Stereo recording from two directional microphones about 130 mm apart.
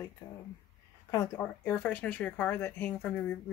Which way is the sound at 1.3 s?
15° left (ahead or behind).